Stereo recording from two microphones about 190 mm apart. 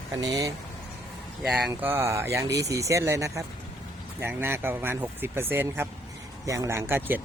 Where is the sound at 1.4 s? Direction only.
5° right (ahead or behind).